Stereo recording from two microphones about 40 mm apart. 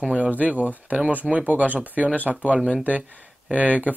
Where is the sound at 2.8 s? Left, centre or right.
Right.